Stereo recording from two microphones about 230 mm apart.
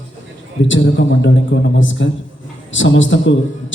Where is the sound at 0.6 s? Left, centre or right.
Left.